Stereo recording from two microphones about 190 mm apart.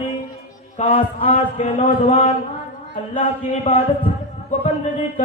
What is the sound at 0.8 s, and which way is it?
A man's voice, 40° left (ahead or behind).